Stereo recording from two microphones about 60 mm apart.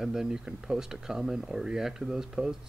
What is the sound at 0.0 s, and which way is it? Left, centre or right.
Speech, centre.